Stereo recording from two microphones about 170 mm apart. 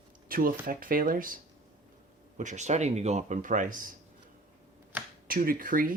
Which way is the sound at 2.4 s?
45° right (ahead or behind).